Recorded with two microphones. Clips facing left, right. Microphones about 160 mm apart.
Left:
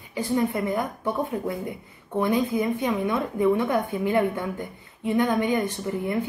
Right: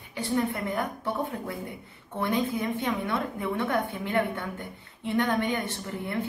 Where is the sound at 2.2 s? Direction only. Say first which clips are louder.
Left 4 dB; 15° left (ahead or behind).